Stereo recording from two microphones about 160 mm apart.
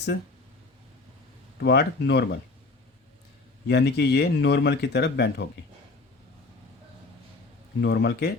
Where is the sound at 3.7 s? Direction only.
90° left.